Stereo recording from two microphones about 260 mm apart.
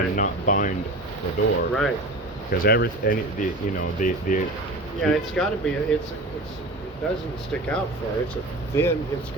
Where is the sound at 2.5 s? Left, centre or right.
Left.